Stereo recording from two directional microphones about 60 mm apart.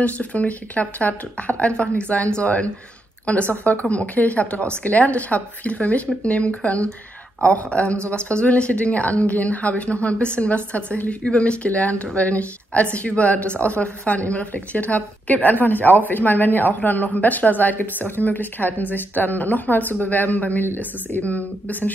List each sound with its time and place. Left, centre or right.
0.0 s a woman's voice: left